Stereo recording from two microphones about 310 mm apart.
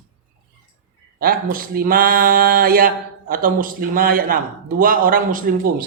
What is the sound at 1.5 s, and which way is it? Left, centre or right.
A man's voice, right.